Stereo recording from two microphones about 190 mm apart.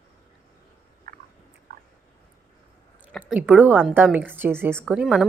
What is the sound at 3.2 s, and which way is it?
A woman's voice, 10° right (ahead or behind).